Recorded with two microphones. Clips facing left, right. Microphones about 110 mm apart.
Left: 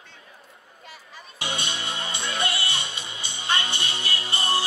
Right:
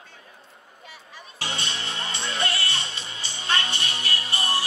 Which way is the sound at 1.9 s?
25° left (ahead or behind).